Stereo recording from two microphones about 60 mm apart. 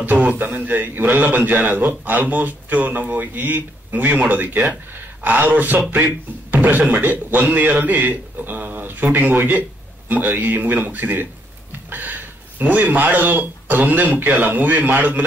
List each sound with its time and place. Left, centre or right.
0.3 s a man's voice: right